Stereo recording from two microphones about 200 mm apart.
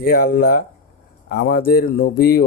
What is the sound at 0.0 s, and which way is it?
A man's voice, 50° left (ahead or behind).